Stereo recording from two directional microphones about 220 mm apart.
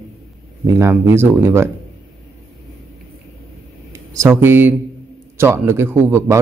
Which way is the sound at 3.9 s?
15° right (ahead or behind).